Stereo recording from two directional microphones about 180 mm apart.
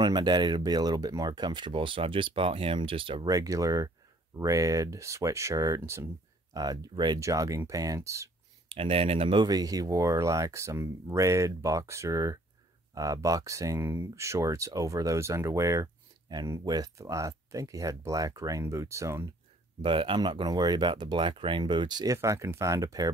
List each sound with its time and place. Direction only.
0.0 s speech: 25° right (ahead or behind)
8.6 s speech: 30° right (ahead or behind); by 19.2 s 15° right (ahead or behind)
19.8 s speech: 30° right (ahead or behind)